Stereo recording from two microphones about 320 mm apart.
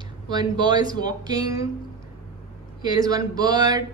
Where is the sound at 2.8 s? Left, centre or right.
Centre.